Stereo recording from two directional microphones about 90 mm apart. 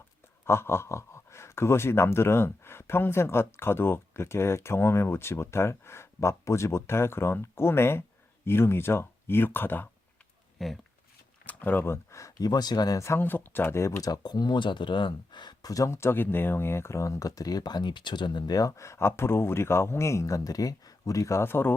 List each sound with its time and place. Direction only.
0.4 s speech: 25° left (ahead or behind)
10.6 s speech: centre (ahead or behind)
11.4 s speech: 20° left (ahead or behind)
14.1 s speech: 50° left (ahead or behind); by 21.8 s 25° left (ahead or behind)